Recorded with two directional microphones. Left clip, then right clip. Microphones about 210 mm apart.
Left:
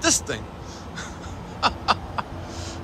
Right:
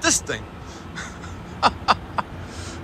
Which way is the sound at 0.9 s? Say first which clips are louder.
Right 2 dB; 15° left (ahead or behind).